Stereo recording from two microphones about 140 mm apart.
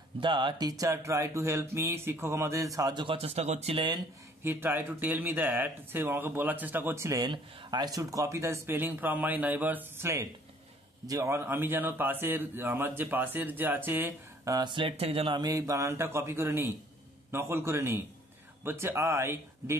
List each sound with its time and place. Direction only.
0.2 s speech: 35° right (ahead or behind)
4.4 s a man's voice: 15° right (ahead or behind)
14.5 s a man's voice: 35° right (ahead or behind)